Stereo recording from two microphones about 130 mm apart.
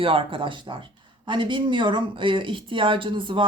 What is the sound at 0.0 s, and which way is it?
Speech, 45° right (ahead or behind).